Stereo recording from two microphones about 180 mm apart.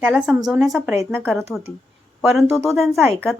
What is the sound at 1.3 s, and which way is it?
A woman's voice, centre (ahead or behind).